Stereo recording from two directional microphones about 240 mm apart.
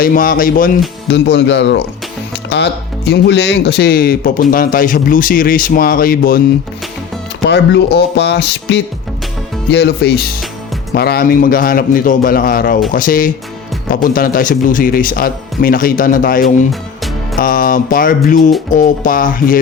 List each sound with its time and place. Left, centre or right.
0.0 s speech: left
1.1 s speech: left
3.1 s speech: left
7.4 s speech: left